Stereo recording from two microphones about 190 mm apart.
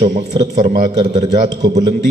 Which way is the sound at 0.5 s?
40° right (ahead or behind).